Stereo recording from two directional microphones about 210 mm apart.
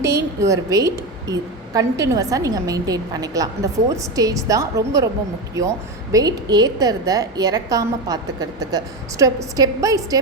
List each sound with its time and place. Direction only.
0.0 s a woman's voice: 15° right (ahead or behind)